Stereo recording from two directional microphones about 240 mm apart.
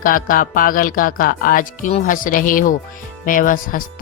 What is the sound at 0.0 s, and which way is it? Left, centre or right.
Speech, left.